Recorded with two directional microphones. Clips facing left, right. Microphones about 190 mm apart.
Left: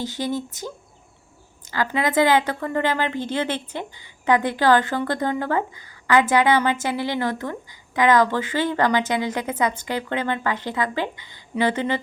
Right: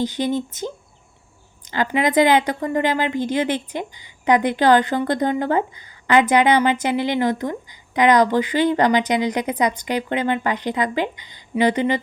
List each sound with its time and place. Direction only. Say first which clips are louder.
0.0 s a woman's voice: right 4 dB; 20° right (ahead or behind)